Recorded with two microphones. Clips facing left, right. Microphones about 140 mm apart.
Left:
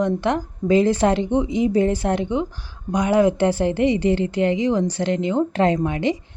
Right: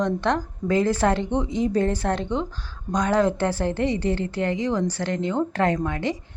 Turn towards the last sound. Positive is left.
turn(degrees=20)  # may be behind; listen again after turning